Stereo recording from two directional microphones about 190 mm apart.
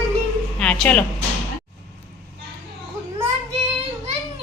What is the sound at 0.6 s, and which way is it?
Speech, 5° left (ahead or behind).